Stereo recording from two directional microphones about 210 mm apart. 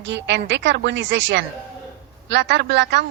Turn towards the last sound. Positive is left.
turn(degrees=-55)  # may be behind; listen again after turning